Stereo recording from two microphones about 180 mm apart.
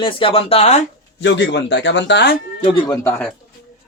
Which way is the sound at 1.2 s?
80° left.